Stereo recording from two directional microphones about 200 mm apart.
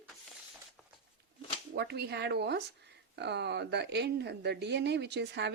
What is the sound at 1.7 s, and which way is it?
Speech, 55° right (ahead or behind).